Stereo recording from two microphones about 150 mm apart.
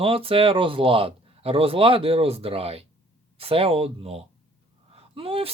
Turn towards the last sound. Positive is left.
turn(degrees=-40)  # may be behind; listen again after turning